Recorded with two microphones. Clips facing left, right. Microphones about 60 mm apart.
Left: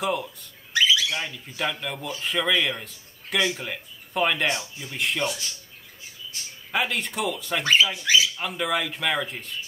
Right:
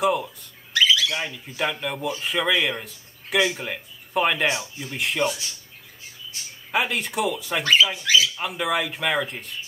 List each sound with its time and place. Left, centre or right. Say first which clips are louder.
0.0 s speech: right 4 dB; centre
0.7 s squawk: right 1 dB; left
1.3 s speech: right 2 dB; centre
6.7 s speech: right 2 dB; centre
8.0 s speech: right 1 dB; centre
8.4 s speech: right 2 dB; centre